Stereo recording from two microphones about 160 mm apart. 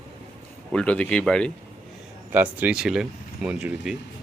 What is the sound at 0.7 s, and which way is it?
Speech, 5° left (ahead or behind).